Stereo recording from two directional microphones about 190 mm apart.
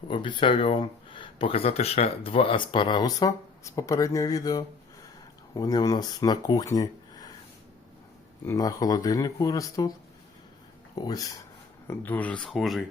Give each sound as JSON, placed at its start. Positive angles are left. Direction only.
{"t": 0.1, "sound": "speech", "side_deg": 25}
{"t": 8.4, "sound": "speech", "side_deg": 20}
{"t": 10.9, "sound": "speech", "side_deg": 20}
{"t": 11.9, "sound": "speech", "side_deg": 10}